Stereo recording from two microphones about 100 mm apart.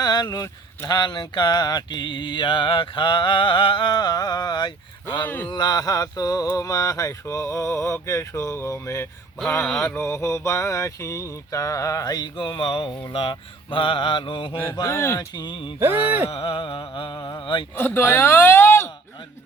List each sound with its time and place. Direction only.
0.0 s a sound: 45° left (ahead or behind)
0.9 s mantra: 45° left (ahead or behind)
5.2 s speech: 15° left (ahead or behind)
5.5 s a sound: 45° left (ahead or behind)
14.8 s speech: 25° left (ahead or behind)
15.4 s mantra: 50° left (ahead or behind)
15.8 s a sound: 20° right (ahead or behind)
16.3 s mantra: 65° left (ahead or behind)
17.7 s speech: 20° left (ahead or behind)